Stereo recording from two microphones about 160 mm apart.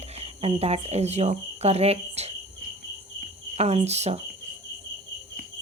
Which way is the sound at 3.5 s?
40° right (ahead or behind).